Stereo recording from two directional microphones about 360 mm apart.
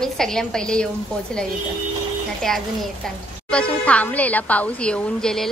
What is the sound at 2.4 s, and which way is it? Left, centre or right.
A woman's voice, centre.